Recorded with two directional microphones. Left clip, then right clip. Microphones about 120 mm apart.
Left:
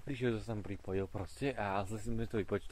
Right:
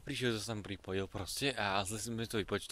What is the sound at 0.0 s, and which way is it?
Speech, 30° right (ahead or behind).